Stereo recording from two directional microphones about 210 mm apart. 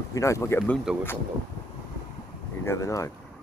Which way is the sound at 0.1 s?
15° left (ahead or behind).